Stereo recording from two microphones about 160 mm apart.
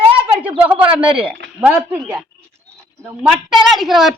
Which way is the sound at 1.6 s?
10° right (ahead or behind).